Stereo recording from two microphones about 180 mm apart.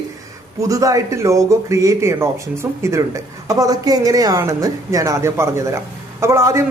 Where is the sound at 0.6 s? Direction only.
20° right (ahead or behind).